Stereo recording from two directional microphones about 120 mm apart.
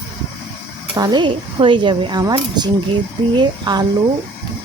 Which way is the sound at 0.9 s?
35° right (ahead or behind).